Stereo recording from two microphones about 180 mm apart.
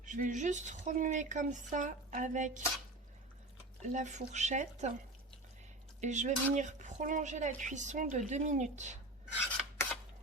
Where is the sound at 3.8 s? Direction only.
40° right (ahead or behind).